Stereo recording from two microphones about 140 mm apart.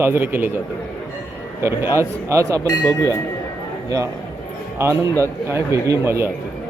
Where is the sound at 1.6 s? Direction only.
20° right (ahead or behind).